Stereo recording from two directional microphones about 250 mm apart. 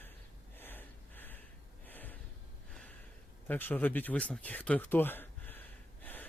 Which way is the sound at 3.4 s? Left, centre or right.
Centre.